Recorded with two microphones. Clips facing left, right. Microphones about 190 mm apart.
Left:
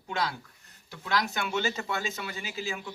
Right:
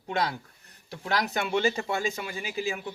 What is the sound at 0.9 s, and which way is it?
Speech, 35° right (ahead or behind).